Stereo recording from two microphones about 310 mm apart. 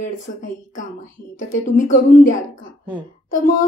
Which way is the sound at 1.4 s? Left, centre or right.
Left.